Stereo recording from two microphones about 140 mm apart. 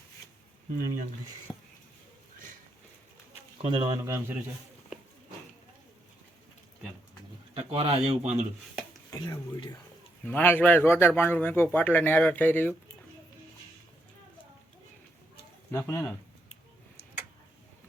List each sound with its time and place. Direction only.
0.8 s speech: 90° right
1.5 s a sound: centre (ahead or behind)
3.6 s speech: 40° right (ahead or behind)
3.8 s a man's voice: 25° right (ahead or behind)
7.5 s speech: 45° right (ahead or behind)
9.0 s speech: 25° left (ahead or behind)
10.2 s speech: 15° left (ahead or behind)
15.7 s speech: 20° left (ahead or behind)